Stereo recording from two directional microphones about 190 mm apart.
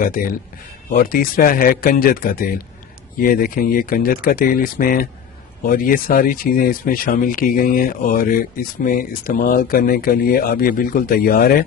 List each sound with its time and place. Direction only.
0.0 s speech: 45° left (ahead or behind)